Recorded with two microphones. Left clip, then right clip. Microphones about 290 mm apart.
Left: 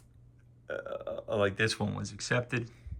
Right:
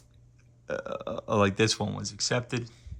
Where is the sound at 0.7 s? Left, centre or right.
Centre.